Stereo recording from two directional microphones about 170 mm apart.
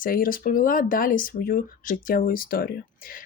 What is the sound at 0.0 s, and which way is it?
Speech, 55° left (ahead or behind).